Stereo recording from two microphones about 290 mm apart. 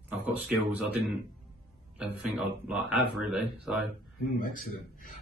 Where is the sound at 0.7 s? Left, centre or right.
Centre.